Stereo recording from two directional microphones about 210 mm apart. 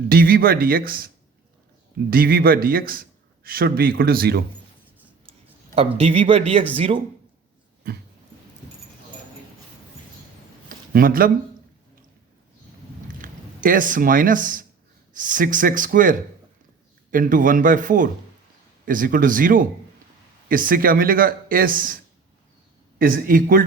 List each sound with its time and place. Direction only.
0.1 s a man's voice: 45° right (ahead or behind)
5.7 s a man's voice: 25° right (ahead or behind)
10.9 s a man's voice: 45° right (ahead or behind)
13.2 s a man's voice: 40° right (ahead or behind)